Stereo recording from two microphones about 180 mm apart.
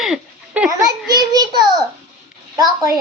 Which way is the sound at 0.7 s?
20° right (ahead or behind).